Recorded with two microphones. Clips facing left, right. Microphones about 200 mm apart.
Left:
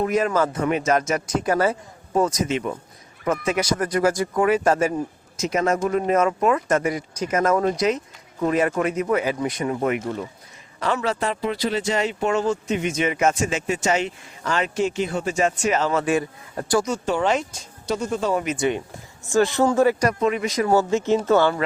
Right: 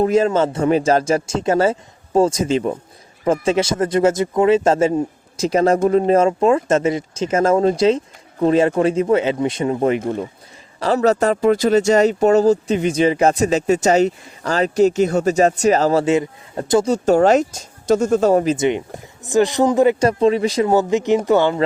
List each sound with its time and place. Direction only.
0.0 s speech: 25° right (ahead or behind)
16.0 s speech: 20° right (ahead or behind)
16.9 s speech: 40° right (ahead or behind)
18.5 s speech: 20° right (ahead or behind)
20.7 s speech: 15° right (ahead or behind)